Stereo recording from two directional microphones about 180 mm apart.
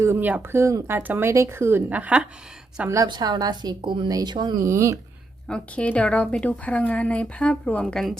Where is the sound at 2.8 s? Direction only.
20° right (ahead or behind).